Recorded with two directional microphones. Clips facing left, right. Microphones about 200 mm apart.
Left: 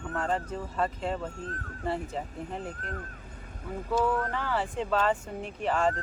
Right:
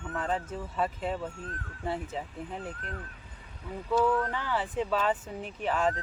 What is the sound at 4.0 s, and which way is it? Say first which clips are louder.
Speech: right 1 dB; centre (ahead or behind).